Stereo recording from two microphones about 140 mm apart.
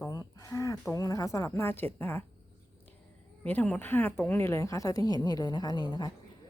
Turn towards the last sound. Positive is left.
turn(degrees=30)  # may be behind; listen again after turning